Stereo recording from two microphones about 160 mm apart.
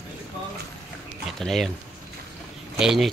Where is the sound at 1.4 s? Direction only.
Centre (ahead or behind).